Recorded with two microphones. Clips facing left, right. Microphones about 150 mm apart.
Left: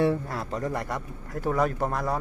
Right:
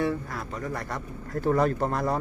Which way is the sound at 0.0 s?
30° left (ahead or behind).